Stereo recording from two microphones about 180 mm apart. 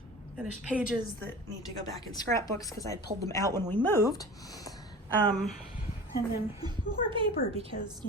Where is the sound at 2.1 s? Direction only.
20° left (ahead or behind).